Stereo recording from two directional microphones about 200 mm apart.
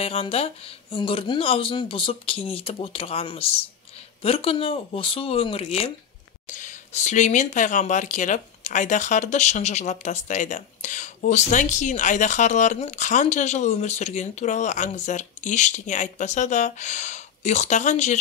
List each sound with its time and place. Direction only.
0.0 s speech: 30° left (ahead or behind)